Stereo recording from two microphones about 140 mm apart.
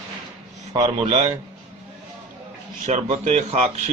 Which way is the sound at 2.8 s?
55° right (ahead or behind).